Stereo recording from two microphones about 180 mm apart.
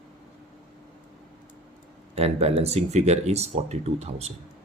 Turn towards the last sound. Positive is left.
turn(degrees=-35)  # may be behind; listen again after turning